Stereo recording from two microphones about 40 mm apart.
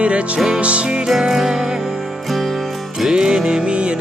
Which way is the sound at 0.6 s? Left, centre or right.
Right.